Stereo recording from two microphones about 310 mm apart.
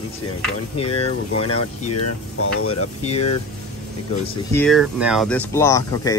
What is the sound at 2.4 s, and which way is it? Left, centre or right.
Speech, left.